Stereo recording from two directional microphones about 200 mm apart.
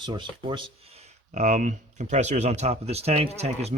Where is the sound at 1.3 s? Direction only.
40° right (ahead or behind).